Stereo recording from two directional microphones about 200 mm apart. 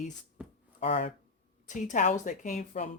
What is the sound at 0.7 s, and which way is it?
Speech, 30° left (ahead or behind).